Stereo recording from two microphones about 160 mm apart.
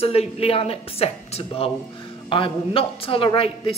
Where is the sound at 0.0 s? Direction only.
40° left (ahead or behind).